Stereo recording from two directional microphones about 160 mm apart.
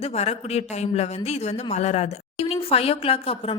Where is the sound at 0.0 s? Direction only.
40° left (ahead or behind).